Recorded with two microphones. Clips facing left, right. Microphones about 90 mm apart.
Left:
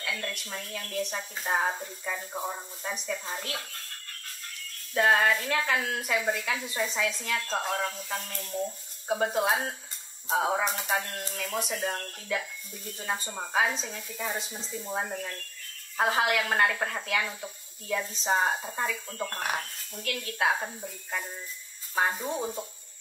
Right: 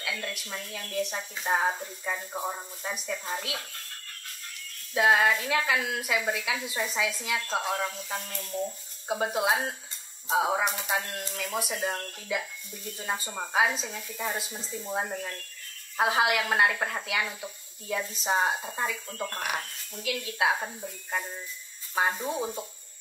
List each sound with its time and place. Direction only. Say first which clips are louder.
0.0 s a woman's voice: even; 5° right (ahead or behind)
4.9 s a woman's voice: right 1 dB; 5° right (ahead or behind)
21.9 s a woman's voice: even; centre (ahead or behind)